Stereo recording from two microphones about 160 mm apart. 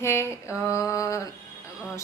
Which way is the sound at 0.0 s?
15° left (ahead or behind).